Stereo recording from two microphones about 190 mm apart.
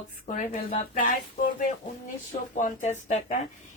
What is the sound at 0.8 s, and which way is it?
Speech, 45° left (ahead or behind).